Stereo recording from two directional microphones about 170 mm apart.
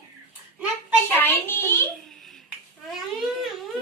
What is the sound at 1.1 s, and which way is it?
Speech, 10° left (ahead or behind).